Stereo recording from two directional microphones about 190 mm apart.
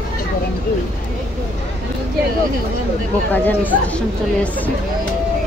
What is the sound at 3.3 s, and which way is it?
Speech, 10° left (ahead or behind).